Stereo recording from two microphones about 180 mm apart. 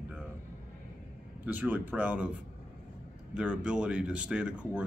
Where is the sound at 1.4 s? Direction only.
10° right (ahead or behind).